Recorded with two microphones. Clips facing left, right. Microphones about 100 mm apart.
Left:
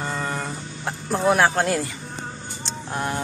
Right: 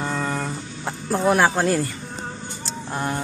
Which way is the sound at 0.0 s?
Centre (ahead or behind).